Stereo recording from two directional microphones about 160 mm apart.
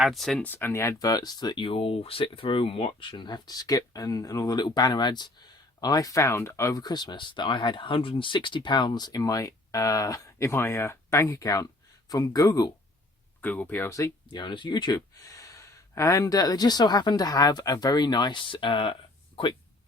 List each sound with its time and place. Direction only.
0.0 s speech: centre (ahead or behind); by 12.7 s 20° left (ahead or behind)
13.4 s speech: 10° left (ahead or behind); by 18.9 s 30° left (ahead or behind)